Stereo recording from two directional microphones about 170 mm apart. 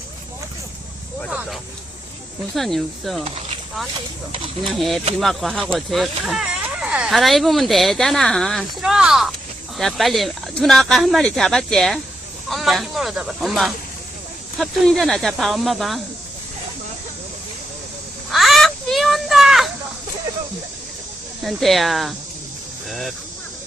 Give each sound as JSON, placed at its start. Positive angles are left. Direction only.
{"t": 1.3, "sound": "vehicle", "side_deg": -5}
{"t": 2.6, "sound": "speech", "side_deg": 0}
{"t": 4.6, "sound": "speech", "side_deg": 0}
{"t": 18.3, "sound": "a sound", "side_deg": 0}
{"t": 21.4, "sound": "speech", "side_deg": 0}